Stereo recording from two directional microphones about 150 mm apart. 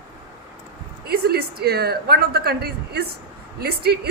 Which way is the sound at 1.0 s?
90° right.